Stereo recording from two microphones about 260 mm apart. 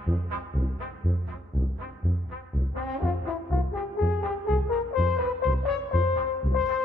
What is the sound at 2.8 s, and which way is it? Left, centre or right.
Brass instrument, centre.